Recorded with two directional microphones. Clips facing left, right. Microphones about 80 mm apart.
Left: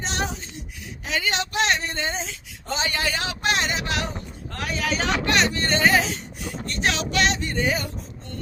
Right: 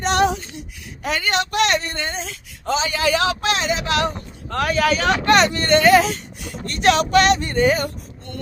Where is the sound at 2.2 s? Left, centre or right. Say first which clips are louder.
Right 6 dB; right.